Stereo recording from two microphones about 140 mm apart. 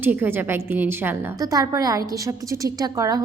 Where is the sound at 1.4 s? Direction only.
25° right (ahead or behind).